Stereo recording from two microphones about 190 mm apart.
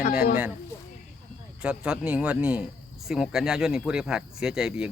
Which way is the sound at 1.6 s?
5° right (ahead or behind).